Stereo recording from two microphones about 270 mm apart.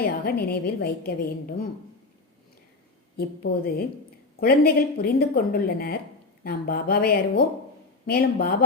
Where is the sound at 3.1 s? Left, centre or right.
Left.